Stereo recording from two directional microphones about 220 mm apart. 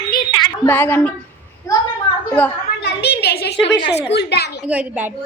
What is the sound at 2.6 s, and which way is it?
A woman's voice, 50° left (ahead or behind).